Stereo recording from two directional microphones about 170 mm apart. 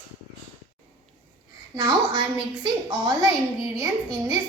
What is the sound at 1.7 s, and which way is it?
A child's voice, 25° right (ahead or behind).